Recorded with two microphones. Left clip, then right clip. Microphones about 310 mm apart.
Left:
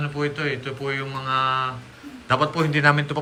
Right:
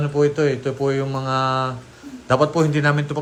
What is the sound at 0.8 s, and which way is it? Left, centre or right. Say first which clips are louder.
Speech: right 5 dB; left.